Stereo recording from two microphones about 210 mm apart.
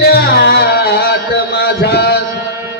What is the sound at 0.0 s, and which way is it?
Music, 50° left (ahead or behind).